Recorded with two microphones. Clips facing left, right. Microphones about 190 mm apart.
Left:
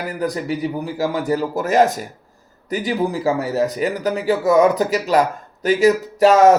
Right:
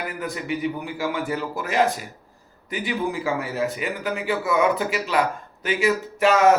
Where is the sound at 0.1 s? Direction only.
40° left (ahead or behind).